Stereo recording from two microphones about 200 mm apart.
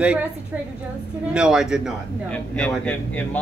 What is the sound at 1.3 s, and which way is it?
A woman's voice, 5° right (ahead or behind).